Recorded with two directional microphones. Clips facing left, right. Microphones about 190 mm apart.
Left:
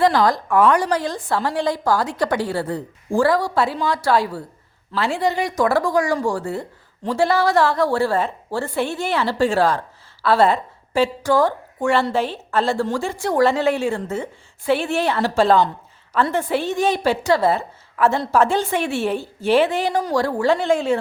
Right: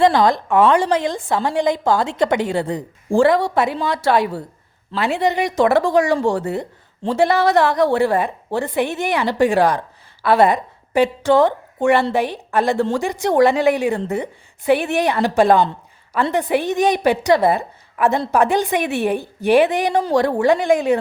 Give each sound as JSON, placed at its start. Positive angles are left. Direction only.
{"t": 0.0, "sound": "a woman's voice", "side_deg": -20}